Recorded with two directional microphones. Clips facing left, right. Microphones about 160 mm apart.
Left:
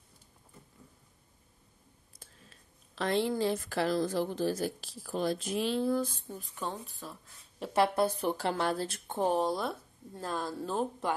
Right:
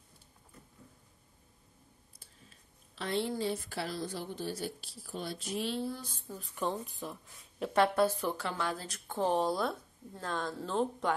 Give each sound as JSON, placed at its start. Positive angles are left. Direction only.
{"t": 3.0, "sound": "a woman's voice", "side_deg": 90}
{"t": 6.5, "sound": "speech", "side_deg": -15}
{"t": 7.5, "sound": "a woman's voice", "side_deg": 5}
{"t": 8.2, "sound": "speech", "side_deg": 30}
{"t": 9.3, "sound": "speech", "side_deg": 0}